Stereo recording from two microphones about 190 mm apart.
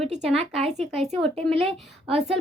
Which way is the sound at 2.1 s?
30° right (ahead or behind).